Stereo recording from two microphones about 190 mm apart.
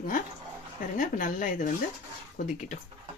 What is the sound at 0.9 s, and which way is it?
Speech, 45° left (ahead or behind).